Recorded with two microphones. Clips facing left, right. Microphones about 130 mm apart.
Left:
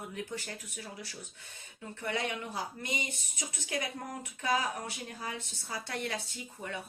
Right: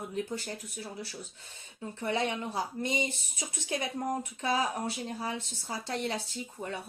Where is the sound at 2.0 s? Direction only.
25° right (ahead or behind).